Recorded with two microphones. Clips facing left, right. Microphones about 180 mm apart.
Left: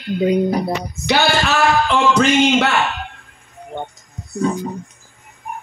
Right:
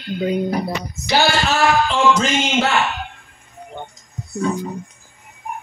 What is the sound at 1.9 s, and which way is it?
Music, 65° left (ahead or behind).